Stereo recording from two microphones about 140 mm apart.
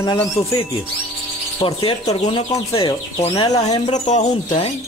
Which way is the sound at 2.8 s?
30° left (ahead or behind).